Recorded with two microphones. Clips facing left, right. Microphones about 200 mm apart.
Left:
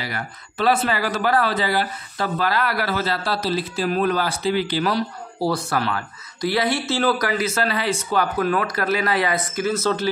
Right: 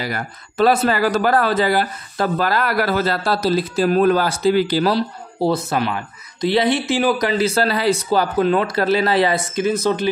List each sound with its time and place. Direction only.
0.0 s speech: 45° right (ahead or behind); by 10.0 s 15° right (ahead or behind)